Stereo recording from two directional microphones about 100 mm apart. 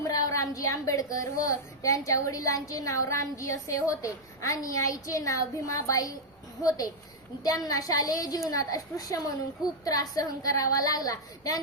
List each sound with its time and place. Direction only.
0.0 s a woman's voice: 35° left (ahead or behind)